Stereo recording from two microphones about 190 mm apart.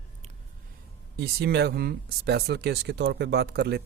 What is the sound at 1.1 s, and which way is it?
Speech, 55° right (ahead or behind).